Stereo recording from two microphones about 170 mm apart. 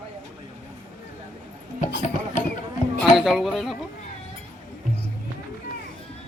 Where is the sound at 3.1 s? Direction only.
Centre (ahead or behind).